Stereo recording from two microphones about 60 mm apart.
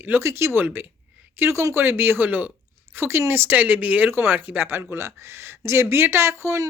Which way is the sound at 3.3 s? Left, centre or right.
Right.